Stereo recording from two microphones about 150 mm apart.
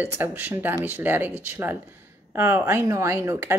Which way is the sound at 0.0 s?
15° right (ahead or behind).